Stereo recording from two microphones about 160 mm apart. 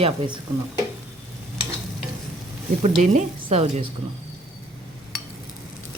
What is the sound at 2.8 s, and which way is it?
Speech, 50° right (ahead or behind).